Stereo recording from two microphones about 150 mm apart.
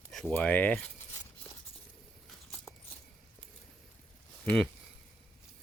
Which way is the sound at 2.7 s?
Centre (ahead or behind).